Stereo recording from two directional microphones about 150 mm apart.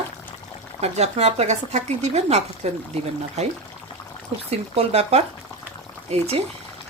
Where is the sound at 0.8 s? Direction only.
45° right (ahead or behind).